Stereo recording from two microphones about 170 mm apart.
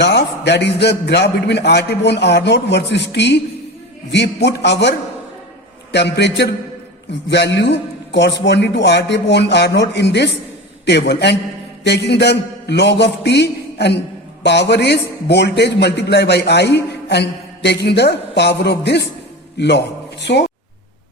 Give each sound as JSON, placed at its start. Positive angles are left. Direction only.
{"t": 0.0, "sound": "a man's voice", "side_deg": 85}